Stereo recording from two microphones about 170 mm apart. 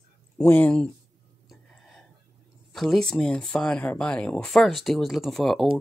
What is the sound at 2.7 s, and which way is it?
Speech, centre (ahead or behind).